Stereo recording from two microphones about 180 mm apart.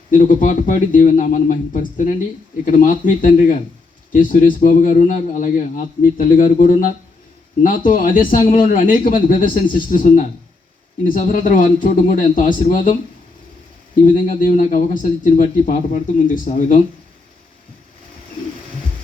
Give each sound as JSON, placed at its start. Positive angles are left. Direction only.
{"t": 0.1, "sound": "speech", "side_deg": 45}
{"t": 14.0, "sound": "speech", "side_deg": 45}